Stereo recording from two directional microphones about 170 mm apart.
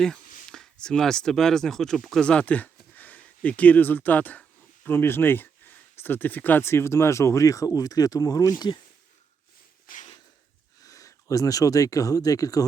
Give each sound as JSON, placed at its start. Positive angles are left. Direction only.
{"t": 0.0, "sound": "speech", "side_deg": 5}
{"t": 9.8, "sound": "a sound", "side_deg": 50}
{"t": 10.8, "sound": "speech", "side_deg": 20}